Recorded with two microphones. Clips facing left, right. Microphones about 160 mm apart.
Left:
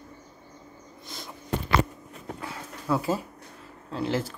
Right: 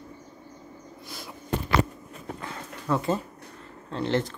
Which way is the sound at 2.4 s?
5° left (ahead or behind).